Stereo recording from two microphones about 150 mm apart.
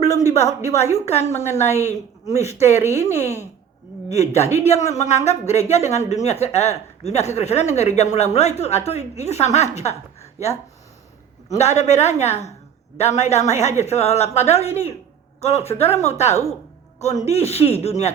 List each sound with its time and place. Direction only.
0.2 s a woman's voice: 50° left (ahead or behind)